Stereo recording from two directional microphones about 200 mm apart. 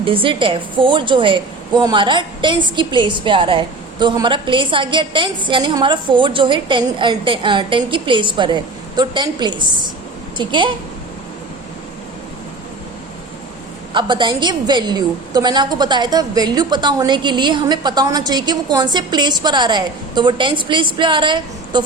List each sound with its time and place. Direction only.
0.0 s a woman's voice: 25° right (ahead or behind)
13.9 s a woman's voice: 25° right (ahead or behind)